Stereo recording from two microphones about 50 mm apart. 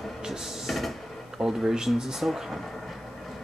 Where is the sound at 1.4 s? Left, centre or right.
Centre.